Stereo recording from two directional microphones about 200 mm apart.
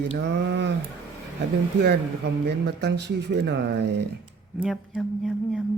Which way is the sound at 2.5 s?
55° right (ahead or behind).